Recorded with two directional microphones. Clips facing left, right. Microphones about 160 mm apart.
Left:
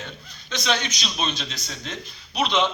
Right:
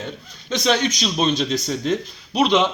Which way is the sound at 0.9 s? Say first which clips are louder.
Right 8 dB; 40° right (ahead or behind).